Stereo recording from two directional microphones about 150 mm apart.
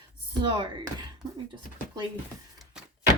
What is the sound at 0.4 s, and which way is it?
Speech, 30° right (ahead or behind).